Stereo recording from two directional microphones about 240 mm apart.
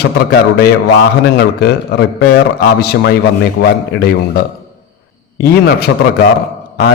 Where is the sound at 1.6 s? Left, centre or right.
Left.